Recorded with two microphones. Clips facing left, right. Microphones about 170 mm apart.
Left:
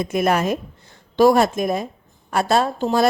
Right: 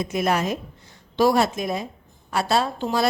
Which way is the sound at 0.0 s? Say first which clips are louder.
Left 4 dB; 55° left (ahead or behind).